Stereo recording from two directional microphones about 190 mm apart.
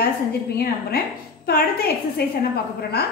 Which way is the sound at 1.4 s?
55° left (ahead or behind).